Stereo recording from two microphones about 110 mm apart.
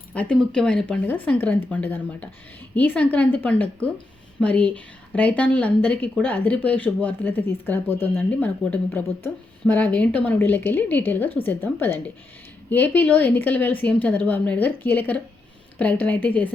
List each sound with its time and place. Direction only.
0.1 s a woman's voice: 10° left (ahead or behind)